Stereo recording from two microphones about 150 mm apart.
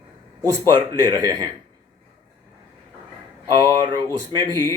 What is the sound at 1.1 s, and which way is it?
Speech, 20° right (ahead or behind).